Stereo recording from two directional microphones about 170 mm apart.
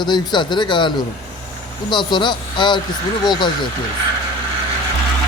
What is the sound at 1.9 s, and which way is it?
Speech, 25° left (ahead or behind).